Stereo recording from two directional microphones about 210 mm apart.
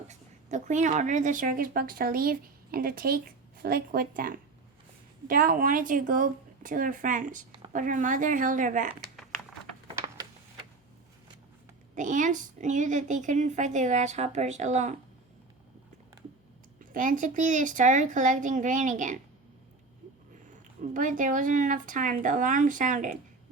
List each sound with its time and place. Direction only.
0.1 s a woman's voice: 35° right (ahead or behind)
11.9 s a woman's voice: 35° right (ahead or behind)
16.9 s a woman's voice: 40° right (ahead or behind)
20.9 s a woman's voice: 40° right (ahead or behind)